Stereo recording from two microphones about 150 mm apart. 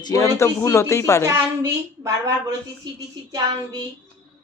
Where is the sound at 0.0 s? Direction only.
20° left (ahead or behind).